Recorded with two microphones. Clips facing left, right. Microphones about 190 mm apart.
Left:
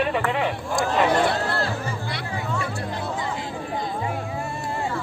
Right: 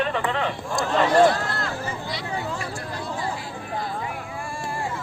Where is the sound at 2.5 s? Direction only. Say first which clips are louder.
Left 3 dB; 30° right (ahead or behind).